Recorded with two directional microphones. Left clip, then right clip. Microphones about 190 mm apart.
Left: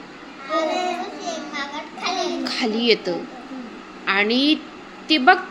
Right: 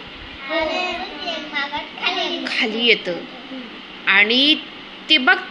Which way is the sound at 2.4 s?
25° left (ahead or behind).